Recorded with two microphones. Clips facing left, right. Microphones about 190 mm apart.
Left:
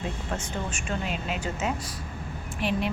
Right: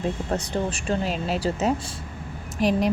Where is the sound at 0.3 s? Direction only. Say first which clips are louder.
Right 6 dB; 35° right (ahead or behind).